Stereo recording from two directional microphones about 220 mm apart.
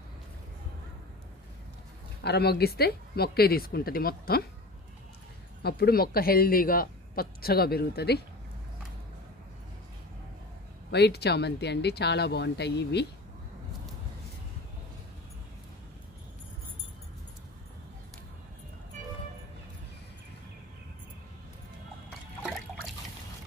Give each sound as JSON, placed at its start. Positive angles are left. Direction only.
{"t": 2.2, "sound": "speech", "side_deg": 45}
{"t": 5.6, "sound": "speech", "side_deg": 45}
{"t": 10.9, "sound": "speech", "side_deg": 50}
{"t": 22.4, "sound": "trickle", "side_deg": 5}